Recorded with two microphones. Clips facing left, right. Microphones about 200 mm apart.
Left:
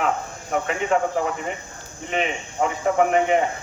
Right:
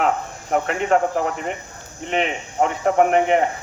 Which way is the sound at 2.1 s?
60° right (ahead or behind).